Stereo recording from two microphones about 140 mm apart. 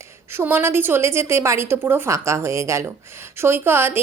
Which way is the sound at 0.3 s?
15° right (ahead or behind).